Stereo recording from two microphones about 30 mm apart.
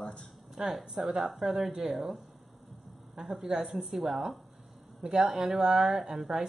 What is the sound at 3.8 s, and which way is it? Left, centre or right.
Speech, centre.